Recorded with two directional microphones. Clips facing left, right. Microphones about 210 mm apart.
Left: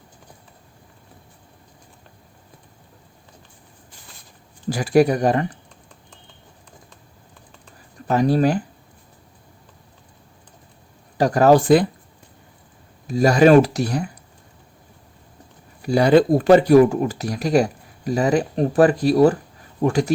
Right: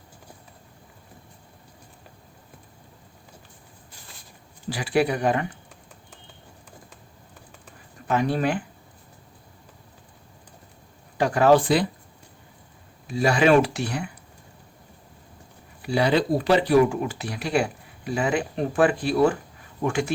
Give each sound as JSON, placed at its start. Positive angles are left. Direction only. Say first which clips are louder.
{"t": 4.7, "sound": "speech", "louder": "left 7 dB", "side_deg": 45}
{"t": 8.0, "sound": "speech", "louder": "left 6 dB", "side_deg": 35}
{"t": 11.2, "sound": "speech", "louder": "left 3 dB", "side_deg": 40}
{"t": 13.1, "sound": "speech", "louder": "left 6 dB", "side_deg": 40}
{"t": 15.8, "sound": "speech", "louder": "left 7 dB", "side_deg": 45}